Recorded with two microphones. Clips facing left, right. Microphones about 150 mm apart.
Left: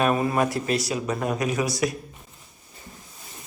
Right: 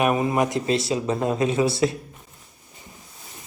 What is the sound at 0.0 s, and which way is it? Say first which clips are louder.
Speech: right 1 dB; 20° right (ahead or behind).